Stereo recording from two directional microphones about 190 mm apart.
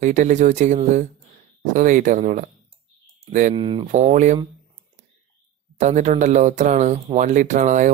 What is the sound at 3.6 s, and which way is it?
Speech, 25° right (ahead or behind).